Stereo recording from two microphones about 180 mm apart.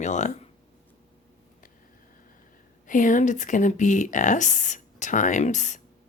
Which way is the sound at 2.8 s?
45° left (ahead or behind).